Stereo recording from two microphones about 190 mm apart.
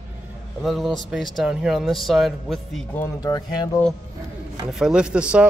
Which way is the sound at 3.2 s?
20° left (ahead or behind).